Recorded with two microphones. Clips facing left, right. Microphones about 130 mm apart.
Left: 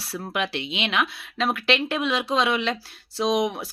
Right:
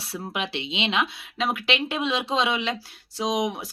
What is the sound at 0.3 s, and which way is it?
Speech, 20° right (ahead or behind).